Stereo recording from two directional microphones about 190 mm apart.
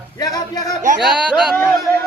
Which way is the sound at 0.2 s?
20° left (ahead or behind).